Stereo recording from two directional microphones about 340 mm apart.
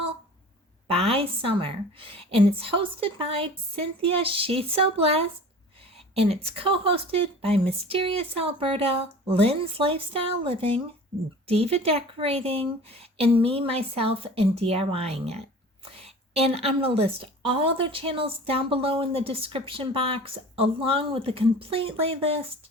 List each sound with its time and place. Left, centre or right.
0.9 s a woman's voice: centre